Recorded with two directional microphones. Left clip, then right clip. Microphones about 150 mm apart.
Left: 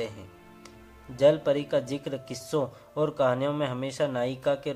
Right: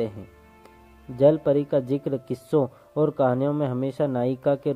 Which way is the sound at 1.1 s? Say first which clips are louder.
Right 3 dB; 45° right (ahead or behind).